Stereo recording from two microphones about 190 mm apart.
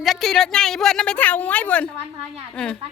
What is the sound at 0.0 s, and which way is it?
A woman's voice, centre (ahead or behind).